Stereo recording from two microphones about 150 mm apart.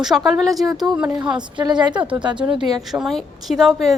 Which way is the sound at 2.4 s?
5° right (ahead or behind).